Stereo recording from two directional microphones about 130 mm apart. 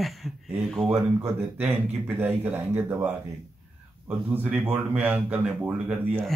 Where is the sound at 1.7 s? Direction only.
15° right (ahead or behind).